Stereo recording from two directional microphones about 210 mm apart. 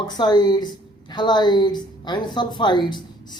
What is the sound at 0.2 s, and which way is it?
A woman's voice, 20° left (ahead or behind).